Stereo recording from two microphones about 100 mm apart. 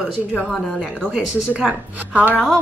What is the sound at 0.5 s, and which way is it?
Speech, 5° left (ahead or behind).